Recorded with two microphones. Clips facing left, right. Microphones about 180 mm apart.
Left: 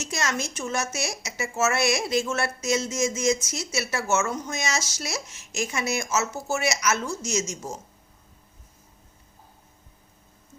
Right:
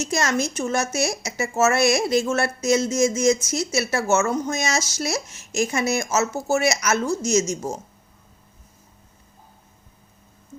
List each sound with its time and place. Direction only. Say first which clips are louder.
0.0 s speech: right 6 dB; 45° right (ahead or behind)